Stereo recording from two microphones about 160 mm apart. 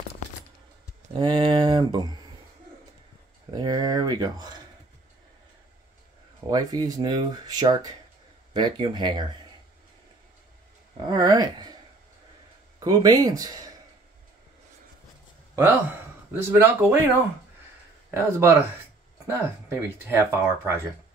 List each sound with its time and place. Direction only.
1.1 s speech: 30° right (ahead or behind)
3.5 s speech: 25° right (ahead or behind)
6.5 s speech: 25° right (ahead or behind)
11.1 s speech: 25° right (ahead or behind)
12.8 s speech: 25° right (ahead or behind)
16.4 s speech: 15° right (ahead or behind)
18.1 s speech: 15° right (ahead or behind)